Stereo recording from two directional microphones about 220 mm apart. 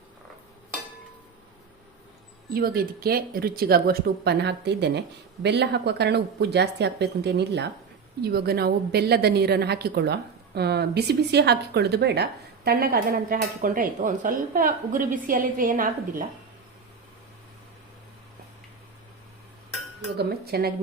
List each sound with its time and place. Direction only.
2.5 s a woman's voice: 45° right (ahead or behind)
20.1 s a woman's voice: 45° right (ahead or behind)